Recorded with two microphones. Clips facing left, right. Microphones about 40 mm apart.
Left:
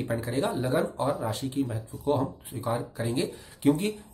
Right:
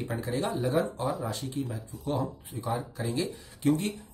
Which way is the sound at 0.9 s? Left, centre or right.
Left.